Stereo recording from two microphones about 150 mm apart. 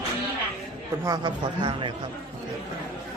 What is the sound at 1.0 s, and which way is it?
Speech, 30° right (ahead or behind).